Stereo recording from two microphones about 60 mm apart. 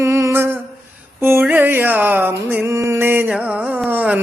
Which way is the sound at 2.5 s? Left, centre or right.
Right.